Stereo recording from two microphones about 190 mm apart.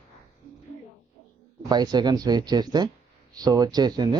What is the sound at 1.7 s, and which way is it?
Speech, 20° right (ahead or behind).